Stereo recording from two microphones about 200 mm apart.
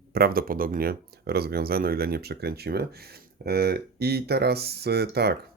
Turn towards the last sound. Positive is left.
turn(degrees=-55)  # may be behind; listen again after turning